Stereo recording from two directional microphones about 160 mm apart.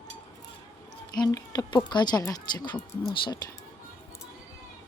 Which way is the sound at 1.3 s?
25° left (ahead or behind).